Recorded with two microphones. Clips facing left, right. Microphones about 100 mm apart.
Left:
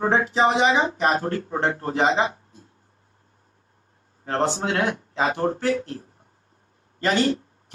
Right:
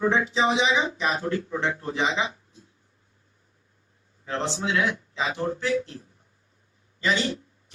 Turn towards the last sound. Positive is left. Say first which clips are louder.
# left 5 dB
turn(degrees=50)  # may be behind; listen again after turning